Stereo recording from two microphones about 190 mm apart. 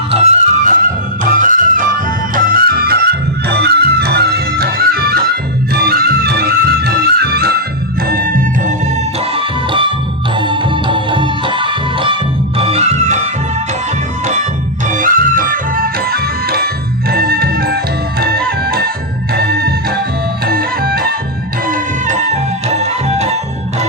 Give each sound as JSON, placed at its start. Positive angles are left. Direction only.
{"t": 0.1, "sound": "music", "side_deg": -35}
{"t": 9.3, "sound": "music", "side_deg": -25}
{"t": 14.8, "sound": "music", "side_deg": -45}